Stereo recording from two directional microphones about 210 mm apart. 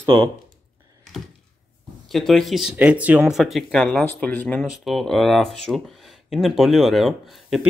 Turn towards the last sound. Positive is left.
turn(degrees=0)  # may be behind; listen again after turning